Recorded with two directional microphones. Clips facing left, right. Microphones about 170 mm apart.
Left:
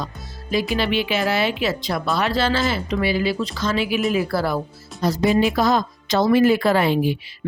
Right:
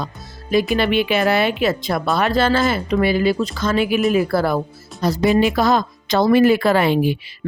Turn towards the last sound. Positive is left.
turn(degrees=-65)  # may be behind; listen again after turning